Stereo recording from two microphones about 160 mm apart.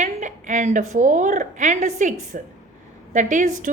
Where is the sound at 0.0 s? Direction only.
50° right (ahead or behind).